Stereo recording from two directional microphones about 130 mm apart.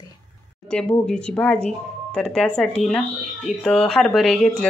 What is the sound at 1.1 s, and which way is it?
Speech, 5° left (ahead or behind).